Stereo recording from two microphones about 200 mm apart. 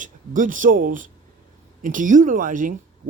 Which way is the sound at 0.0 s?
40° right (ahead or behind).